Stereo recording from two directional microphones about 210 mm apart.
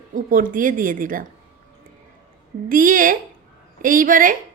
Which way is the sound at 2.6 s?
40° right (ahead or behind).